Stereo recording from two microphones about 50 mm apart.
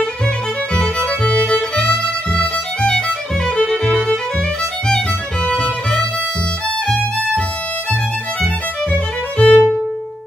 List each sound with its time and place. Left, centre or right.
0.7 s violin: centre
3.7 s music: left
8.9 s music: left